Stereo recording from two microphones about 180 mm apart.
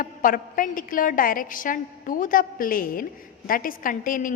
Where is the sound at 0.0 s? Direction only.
50° left (ahead or behind).